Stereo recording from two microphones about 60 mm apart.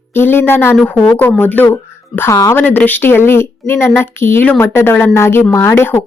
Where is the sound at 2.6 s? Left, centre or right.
Left.